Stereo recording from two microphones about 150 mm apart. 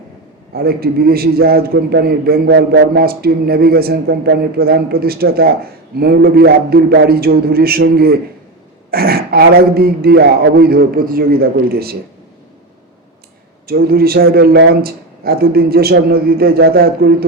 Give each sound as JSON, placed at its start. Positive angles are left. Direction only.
{"t": 0.5, "sound": "a man's voice", "side_deg": -90}
{"t": 13.7, "sound": "a man's voice", "side_deg": -90}